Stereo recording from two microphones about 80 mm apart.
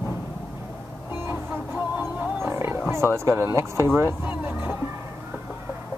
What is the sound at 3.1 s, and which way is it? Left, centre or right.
Speech, right.